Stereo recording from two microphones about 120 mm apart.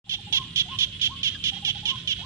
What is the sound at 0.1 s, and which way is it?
Baby laughter, 20° right (ahead or behind).